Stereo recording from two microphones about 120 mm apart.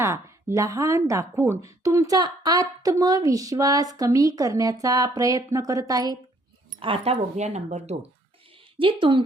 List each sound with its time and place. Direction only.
0.0 s a woman's voice: 20° right (ahead or behind)
6.7 s speech: 55° right (ahead or behind)
8.8 s speech: 45° right (ahead or behind)